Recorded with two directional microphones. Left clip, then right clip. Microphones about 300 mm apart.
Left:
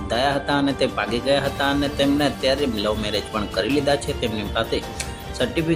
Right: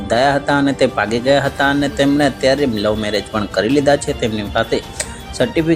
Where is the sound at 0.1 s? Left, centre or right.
Centre.